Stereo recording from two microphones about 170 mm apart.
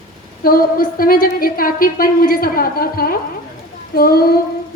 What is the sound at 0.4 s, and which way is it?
A woman's voice, 60° left (ahead or behind).